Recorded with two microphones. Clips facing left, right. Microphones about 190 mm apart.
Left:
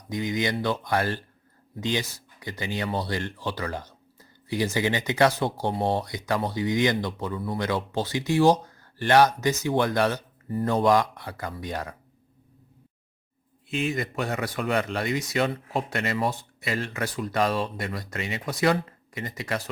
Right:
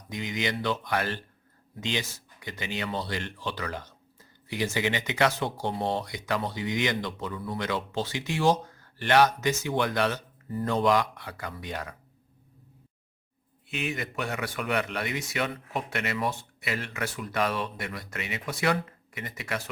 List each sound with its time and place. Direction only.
0.6 s speech: 35° left (ahead or behind)
13.7 s speech: 35° left (ahead or behind)